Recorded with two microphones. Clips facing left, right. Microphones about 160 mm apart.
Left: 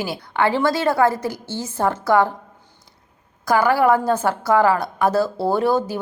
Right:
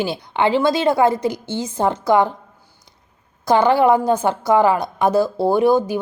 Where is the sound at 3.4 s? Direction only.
20° right (ahead or behind).